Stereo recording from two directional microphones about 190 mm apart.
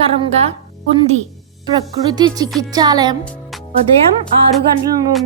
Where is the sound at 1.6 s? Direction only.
20° right (ahead or behind).